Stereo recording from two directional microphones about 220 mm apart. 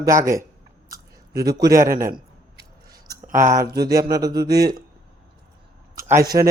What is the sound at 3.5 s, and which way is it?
Speech, 15° right (ahead or behind).